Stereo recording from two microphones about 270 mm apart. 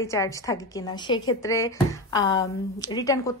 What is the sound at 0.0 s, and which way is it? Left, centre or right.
A woman's voice, centre.